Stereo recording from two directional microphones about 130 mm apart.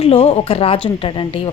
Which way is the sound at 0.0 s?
55° left (ahead or behind).